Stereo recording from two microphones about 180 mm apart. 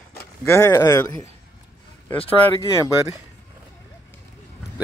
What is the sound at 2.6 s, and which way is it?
Speech, 20° right (ahead or behind).